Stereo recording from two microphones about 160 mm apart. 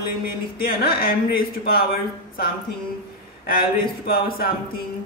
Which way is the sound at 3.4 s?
70° left (ahead or behind).